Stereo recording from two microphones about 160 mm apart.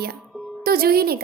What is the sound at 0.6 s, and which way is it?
Speech, 70° right (ahead or behind).